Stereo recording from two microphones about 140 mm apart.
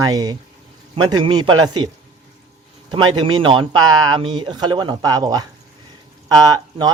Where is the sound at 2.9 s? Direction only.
35° right (ahead or behind).